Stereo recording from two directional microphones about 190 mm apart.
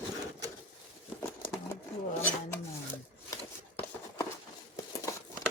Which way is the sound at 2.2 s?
10° left (ahead or behind).